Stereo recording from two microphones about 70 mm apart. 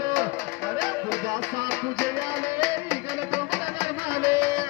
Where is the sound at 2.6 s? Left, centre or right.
Left.